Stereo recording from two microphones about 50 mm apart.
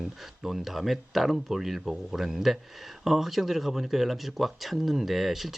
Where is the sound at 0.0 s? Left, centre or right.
Centre.